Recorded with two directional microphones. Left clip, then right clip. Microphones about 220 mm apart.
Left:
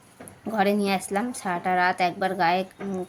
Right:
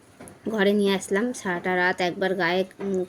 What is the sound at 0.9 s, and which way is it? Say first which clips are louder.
A woman's voice: right 2 dB; 15° left (ahead or behind).